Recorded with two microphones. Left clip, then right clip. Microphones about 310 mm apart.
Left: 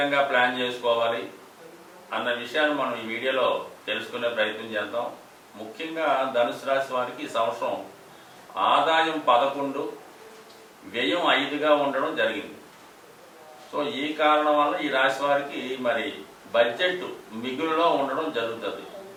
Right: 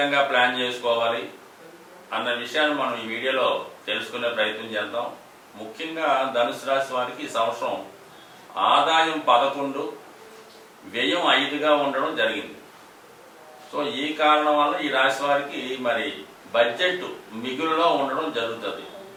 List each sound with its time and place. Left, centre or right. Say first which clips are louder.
0.0 s a man's voice: right 2 dB; centre
7.5 s a man's voice: right 1 dB; left
8.5 s a man's voice: right 2 dB; centre
9.6 s a man's voice: right 1 dB; left
11.0 s a man's voice: right 2 dB; centre
13.7 s a man's voice: right 1 dB; centre